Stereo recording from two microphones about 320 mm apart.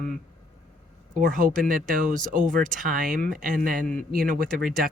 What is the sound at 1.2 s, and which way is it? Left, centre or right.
Speech, right.